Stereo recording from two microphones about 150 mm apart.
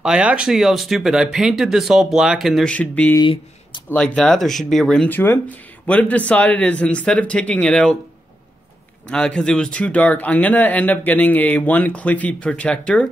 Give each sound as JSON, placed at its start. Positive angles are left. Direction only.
{"t": 0.0, "sound": "speech", "side_deg": -5}
{"t": 3.2, "sound": "speech", "side_deg": 35}
{"t": 3.9, "sound": "speech", "side_deg": 5}
{"t": 9.1, "sound": "speech", "side_deg": 5}